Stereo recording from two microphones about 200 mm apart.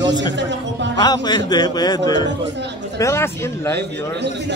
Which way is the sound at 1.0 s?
20° left (ahead or behind).